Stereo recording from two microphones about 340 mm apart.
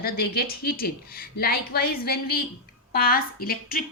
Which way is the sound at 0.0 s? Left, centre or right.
Left.